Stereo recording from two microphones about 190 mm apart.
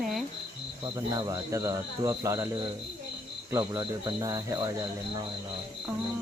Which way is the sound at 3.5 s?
20° right (ahead or behind).